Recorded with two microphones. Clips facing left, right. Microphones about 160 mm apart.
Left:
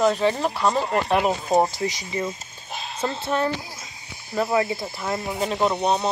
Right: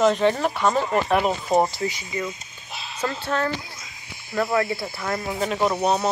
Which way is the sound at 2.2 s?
35° left (ahead or behind).